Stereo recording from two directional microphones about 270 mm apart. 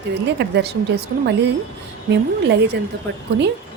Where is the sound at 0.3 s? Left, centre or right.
Right.